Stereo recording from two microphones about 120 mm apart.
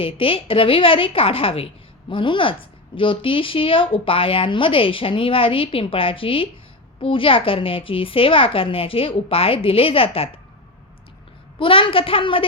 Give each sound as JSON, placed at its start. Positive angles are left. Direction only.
{"t": 0.0, "sound": "a woman's voice", "side_deg": 50}
{"t": 11.6, "sound": "a woman's voice", "side_deg": 45}